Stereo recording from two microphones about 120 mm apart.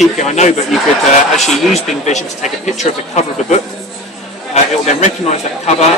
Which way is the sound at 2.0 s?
75° left (ahead or behind).